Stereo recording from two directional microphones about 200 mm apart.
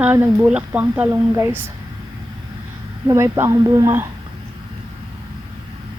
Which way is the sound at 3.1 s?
15° right (ahead or behind).